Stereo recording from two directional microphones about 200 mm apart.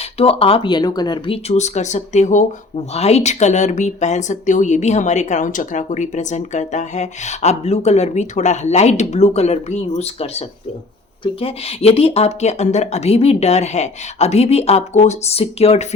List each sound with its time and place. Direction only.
0.0 s speech: 30° left (ahead or behind)